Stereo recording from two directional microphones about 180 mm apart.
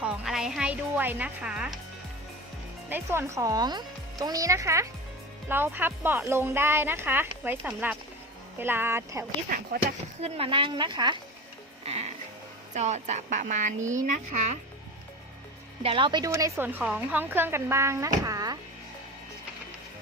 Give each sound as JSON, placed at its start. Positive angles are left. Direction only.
{"t": 0.0, "sound": "a woman's voice", "side_deg": -5}
{"t": 2.9, "sound": "speech", "side_deg": -15}
{"t": 9.5, "sound": "speech", "side_deg": -50}
{"t": 10.2, "sound": "speech", "side_deg": -35}
{"t": 11.9, "sound": "music", "side_deg": -35}
{"t": 12.7, "sound": "speech", "side_deg": -40}
{"t": 15.8, "sound": "speech", "side_deg": -30}